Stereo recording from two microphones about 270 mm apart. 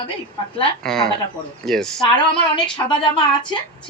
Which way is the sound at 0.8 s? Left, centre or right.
Centre.